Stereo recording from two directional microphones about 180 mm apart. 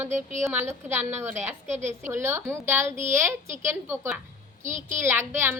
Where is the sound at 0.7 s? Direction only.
10° right (ahead or behind).